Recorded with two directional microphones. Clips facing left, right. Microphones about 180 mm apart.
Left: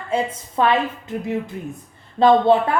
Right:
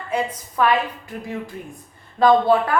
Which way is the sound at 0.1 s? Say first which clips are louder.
Left 2 dB; 25° left (ahead or behind).